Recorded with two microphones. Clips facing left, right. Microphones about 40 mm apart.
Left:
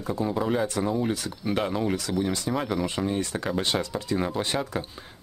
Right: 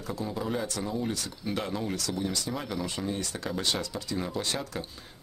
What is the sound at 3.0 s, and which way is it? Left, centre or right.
Speech, left.